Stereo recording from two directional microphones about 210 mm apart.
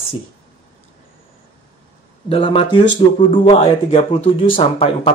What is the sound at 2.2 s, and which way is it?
Speech, 25° left (ahead or behind).